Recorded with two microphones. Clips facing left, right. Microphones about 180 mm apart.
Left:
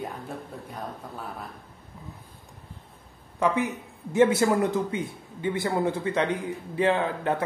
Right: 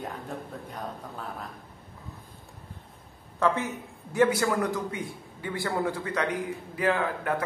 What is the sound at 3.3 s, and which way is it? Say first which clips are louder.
A man's voice: left 2 dB; 15° left (ahead or behind).